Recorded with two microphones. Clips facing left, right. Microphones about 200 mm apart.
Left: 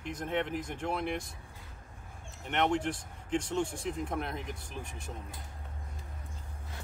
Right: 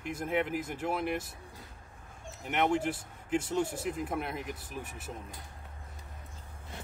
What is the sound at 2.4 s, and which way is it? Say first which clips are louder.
Speech: right 1 dB; 5° right (ahead or behind).